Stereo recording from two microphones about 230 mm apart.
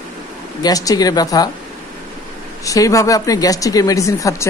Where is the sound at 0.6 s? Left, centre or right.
Centre.